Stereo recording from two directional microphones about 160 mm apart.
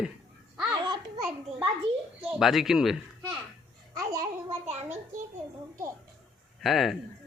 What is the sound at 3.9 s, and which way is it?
Babbling, 20° right (ahead or behind).